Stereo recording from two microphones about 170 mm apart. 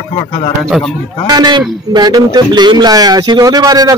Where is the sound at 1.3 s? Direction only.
25° right (ahead or behind).